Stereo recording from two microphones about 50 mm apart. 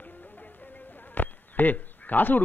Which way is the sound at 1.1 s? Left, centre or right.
Left.